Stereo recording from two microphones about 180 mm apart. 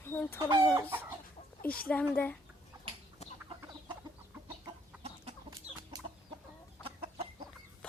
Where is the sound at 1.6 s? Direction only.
55° left (ahead or behind).